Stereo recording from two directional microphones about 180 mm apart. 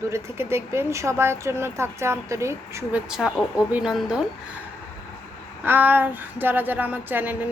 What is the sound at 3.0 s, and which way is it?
Speech, 5° right (ahead or behind).